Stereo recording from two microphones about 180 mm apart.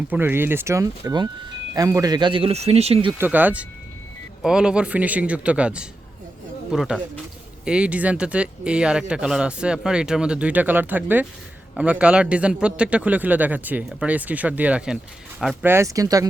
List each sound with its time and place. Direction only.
0.1 s a man's voice: 10° right (ahead or behind); by 3.2 s 30° right (ahead or behind)
3.2 s a man's voice: 10° right (ahead or behind)